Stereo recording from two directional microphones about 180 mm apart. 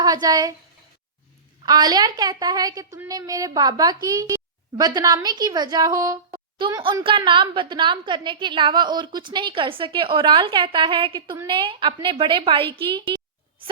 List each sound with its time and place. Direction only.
0.0 s speech: 20° right (ahead or behind)
1.6 s a woman's voice: 25° right (ahead or behind)
6.3 s a sound: 25° right (ahead or behind)
6.8 s a woman's voice: 30° right (ahead or behind)